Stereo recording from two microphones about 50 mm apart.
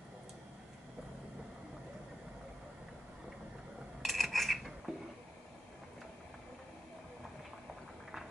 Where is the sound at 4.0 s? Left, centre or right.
Centre.